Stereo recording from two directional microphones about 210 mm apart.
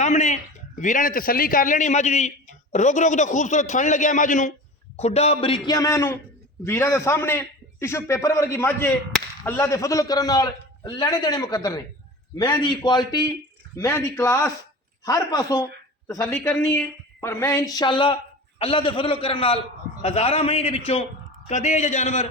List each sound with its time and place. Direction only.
0.0 s a man's voice: 35° left (ahead or behind)